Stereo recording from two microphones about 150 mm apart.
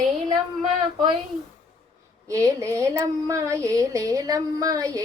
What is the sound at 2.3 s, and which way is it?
A woman's voice, 20° right (ahead or behind).